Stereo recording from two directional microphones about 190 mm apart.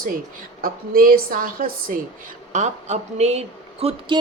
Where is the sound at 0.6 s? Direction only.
50° right (ahead or behind).